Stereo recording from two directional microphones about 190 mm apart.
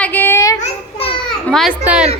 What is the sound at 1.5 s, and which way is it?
Speech, centre (ahead or behind).